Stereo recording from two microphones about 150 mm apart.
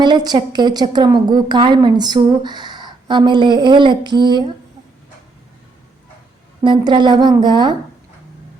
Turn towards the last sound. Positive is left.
turn(degrees=-30)  # may be behind; listen again after turning